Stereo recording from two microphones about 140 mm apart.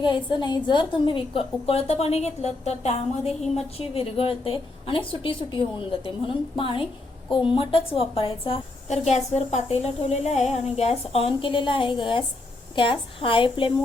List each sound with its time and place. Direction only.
0.0 s a woman's voice: 35° left (ahead or behind)
8.9 s a woman's voice: 55° left (ahead or behind); by 13.7 s 40° left (ahead or behind)